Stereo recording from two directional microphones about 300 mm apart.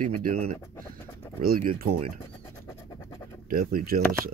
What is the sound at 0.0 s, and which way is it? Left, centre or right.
Speech, right.